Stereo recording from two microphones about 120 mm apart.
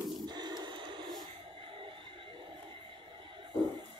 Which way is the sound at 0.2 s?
35° right (ahead or behind).